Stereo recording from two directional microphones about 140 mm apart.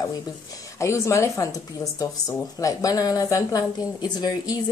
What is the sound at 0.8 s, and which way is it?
Speech, 20° left (ahead or behind).